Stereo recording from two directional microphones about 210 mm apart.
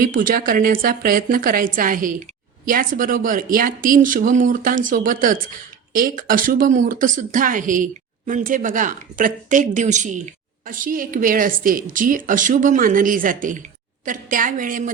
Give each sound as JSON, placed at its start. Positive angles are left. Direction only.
{"t": 0.0, "sound": "speech", "side_deg": -40}